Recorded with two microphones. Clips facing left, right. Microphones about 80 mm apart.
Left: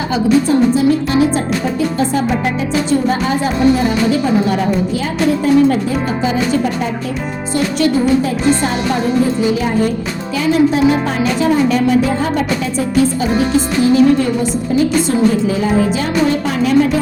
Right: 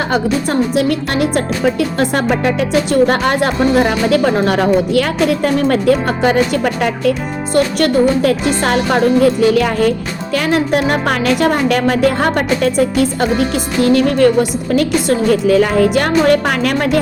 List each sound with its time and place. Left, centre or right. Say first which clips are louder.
0.1 s speech: left 7 dB; right